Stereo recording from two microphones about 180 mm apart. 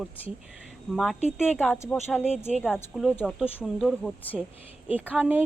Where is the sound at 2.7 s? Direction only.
Centre (ahead or behind).